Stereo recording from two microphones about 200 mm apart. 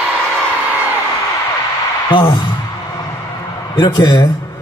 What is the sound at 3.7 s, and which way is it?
Speech, 20° left (ahead or behind).